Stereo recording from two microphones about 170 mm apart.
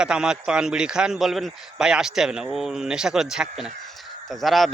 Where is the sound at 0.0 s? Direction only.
5° right (ahead or behind).